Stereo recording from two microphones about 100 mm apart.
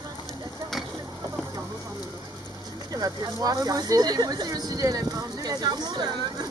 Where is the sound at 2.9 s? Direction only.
40° right (ahead or behind).